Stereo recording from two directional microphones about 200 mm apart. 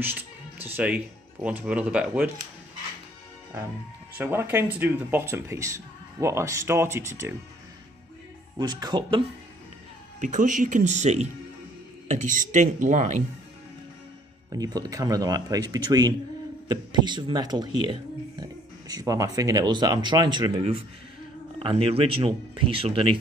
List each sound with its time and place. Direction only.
0.0 s music: 10° right (ahead or behind)
0.7 s speech: 5° right (ahead or behind)
4.2 s speech: 10° right (ahead or behind)
8.5 s speech: 20° right (ahead or behind)
10.2 s speech: 40° right (ahead or behind)
14.5 s speech: 20° right (ahead or behind)